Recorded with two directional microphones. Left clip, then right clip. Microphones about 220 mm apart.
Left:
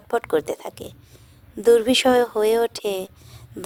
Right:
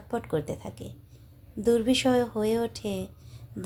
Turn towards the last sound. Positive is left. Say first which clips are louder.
# left 7 dB
turn(degrees=45)  # may be behind; listen again after turning